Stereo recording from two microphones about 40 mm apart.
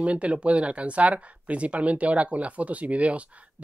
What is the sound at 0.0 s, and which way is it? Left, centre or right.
Speech, right.